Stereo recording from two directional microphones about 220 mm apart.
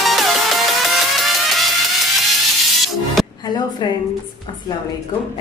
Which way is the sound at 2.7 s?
Centre (ahead or behind).